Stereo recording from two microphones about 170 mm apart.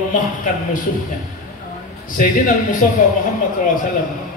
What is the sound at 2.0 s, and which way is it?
Speech, 50° left (ahead or behind).